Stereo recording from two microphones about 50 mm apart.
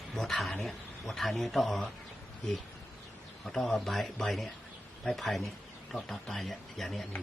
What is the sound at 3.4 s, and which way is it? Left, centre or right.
A man's voice, centre.